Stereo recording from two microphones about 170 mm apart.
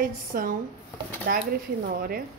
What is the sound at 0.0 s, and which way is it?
Speech, 55° right (ahead or behind).